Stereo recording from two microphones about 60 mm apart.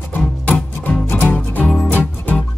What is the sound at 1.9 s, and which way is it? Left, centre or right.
Music, left.